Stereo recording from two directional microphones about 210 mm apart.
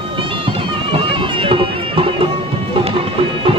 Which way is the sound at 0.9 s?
25° right (ahead or behind).